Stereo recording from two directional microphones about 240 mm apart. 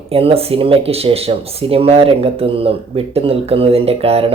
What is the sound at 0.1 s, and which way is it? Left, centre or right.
Speech, right.